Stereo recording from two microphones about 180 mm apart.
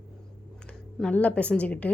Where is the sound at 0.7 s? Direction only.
5° left (ahead or behind).